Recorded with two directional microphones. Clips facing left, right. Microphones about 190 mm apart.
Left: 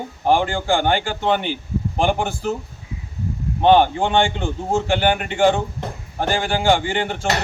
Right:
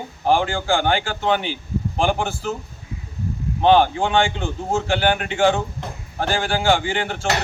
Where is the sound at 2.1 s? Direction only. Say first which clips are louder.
Left 2 dB; 15° left (ahead or behind).